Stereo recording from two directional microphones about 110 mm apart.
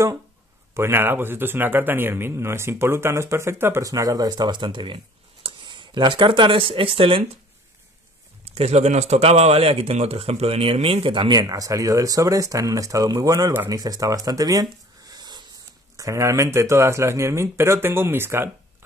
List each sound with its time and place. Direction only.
0.7 s speech: 20° right (ahead or behind); by 7.2 s 55° right (ahead or behind)
8.5 s speech: 75° right (ahead or behind); by 15.4 s 40° right (ahead or behind)
16.0 s speech: 30° right (ahead or behind)